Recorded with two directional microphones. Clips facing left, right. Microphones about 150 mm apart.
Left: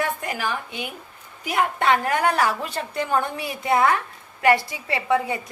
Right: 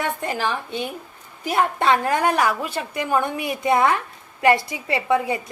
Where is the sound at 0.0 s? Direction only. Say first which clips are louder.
Right 2 dB; 25° right (ahead or behind).